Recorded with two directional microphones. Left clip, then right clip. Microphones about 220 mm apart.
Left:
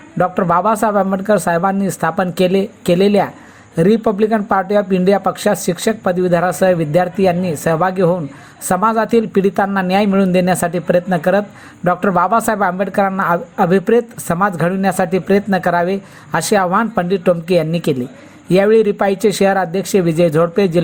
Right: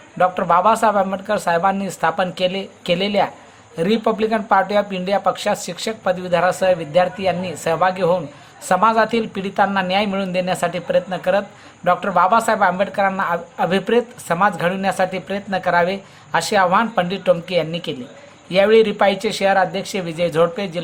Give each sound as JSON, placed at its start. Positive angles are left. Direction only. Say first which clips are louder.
{"t": 0.2, "sound": "speech", "louder": "left 1 dB", "side_deg": 20}